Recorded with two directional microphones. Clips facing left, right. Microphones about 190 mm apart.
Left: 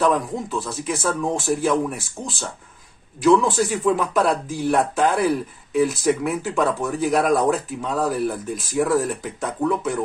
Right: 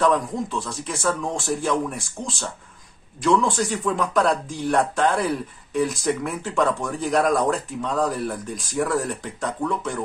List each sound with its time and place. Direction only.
0.0 s speech: 5° left (ahead or behind)